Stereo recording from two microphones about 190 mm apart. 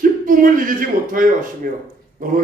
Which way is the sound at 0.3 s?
45° right (ahead or behind).